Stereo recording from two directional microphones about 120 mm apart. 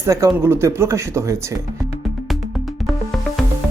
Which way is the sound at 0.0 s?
25° right (ahead or behind).